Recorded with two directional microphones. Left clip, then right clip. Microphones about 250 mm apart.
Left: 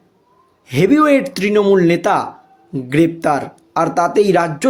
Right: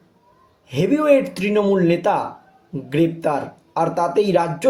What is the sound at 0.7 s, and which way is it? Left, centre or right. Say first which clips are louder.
A man's voice: left 4 dB; left.